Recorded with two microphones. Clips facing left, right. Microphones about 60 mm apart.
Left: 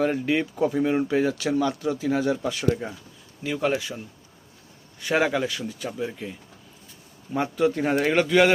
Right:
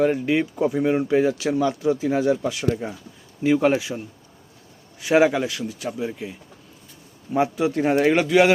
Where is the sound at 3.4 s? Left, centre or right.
Right.